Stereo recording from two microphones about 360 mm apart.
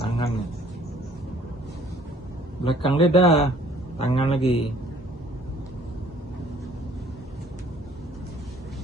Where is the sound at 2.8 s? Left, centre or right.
Centre.